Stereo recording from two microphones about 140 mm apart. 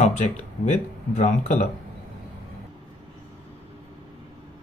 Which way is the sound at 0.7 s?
55° left (ahead or behind).